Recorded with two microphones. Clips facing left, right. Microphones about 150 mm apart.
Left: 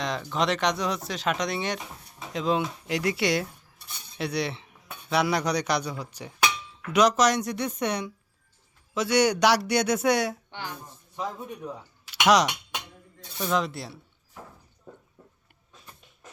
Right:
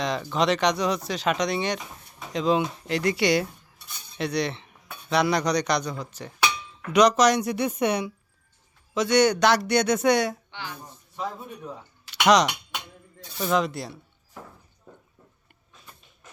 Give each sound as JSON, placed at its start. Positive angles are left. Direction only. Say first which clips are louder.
{"t": 0.0, "sound": "speech", "louder": "right 3 dB", "side_deg": 0}
{"t": 9.0, "sound": "speech", "louder": "right 2 dB", "side_deg": 10}
{"t": 10.5, "sound": "speech", "louder": "left 1 dB", "side_deg": 45}
{"t": 11.3, "sound": "speech", "louder": "left 1 dB", "side_deg": 0}